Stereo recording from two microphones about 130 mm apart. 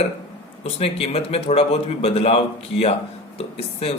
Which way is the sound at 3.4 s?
50° left (ahead or behind).